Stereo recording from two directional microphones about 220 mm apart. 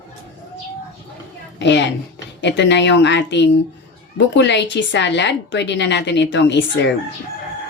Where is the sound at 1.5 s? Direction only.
55° left (ahead or behind).